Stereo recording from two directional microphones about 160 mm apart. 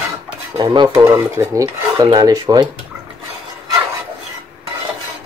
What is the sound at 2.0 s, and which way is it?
Speech, 25° right (ahead or behind).